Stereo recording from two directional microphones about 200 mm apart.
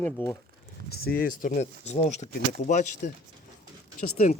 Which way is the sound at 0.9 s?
50° left (ahead or behind).